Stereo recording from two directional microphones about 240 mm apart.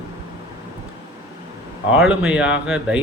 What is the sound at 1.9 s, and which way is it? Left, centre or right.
A man's voice, centre.